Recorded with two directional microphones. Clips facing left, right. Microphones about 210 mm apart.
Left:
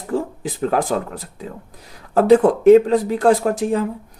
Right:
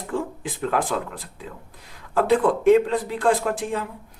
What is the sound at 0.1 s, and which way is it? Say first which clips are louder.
Speech: left 5 dB; 40° left (ahead or behind).